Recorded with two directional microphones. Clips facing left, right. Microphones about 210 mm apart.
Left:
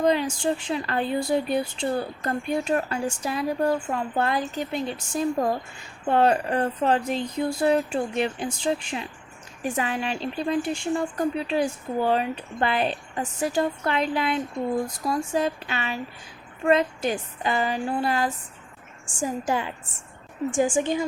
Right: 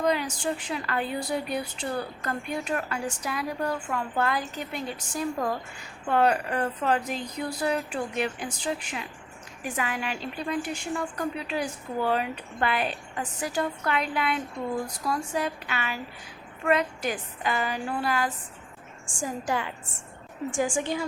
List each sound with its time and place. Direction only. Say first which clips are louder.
0.0 s a woman's voice: left 4 dB; 25° left (ahead or behind)